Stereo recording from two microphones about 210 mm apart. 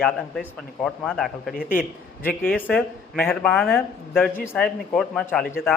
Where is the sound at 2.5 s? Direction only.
5° right (ahead or behind).